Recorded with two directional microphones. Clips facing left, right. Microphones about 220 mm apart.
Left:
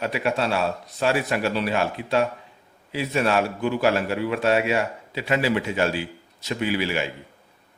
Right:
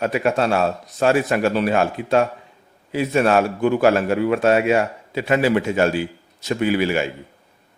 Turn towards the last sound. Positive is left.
turn(degrees=-50)  # may be behind; listen again after turning